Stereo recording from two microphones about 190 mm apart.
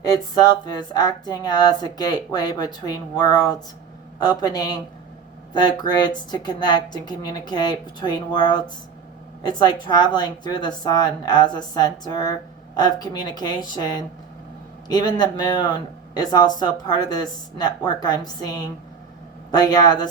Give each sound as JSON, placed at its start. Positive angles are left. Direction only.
{"t": 0.0, "sound": "a woman's voice", "side_deg": 20}